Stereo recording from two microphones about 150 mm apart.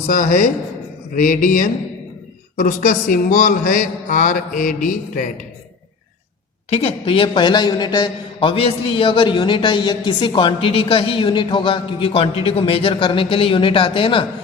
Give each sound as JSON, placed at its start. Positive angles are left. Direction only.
{"t": 0.1, "sound": "a man's voice", "side_deg": 65}
{"t": 6.7, "sound": "a man's voice", "side_deg": 40}